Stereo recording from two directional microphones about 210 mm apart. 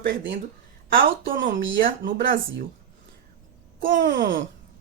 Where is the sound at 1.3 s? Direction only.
40° right (ahead or behind).